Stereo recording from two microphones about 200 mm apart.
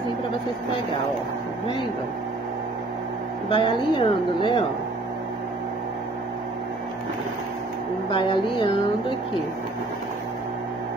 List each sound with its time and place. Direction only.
3.4 s a woman's voice: 25° left (ahead or behind)
8.1 s a woman's voice: 25° left (ahead or behind)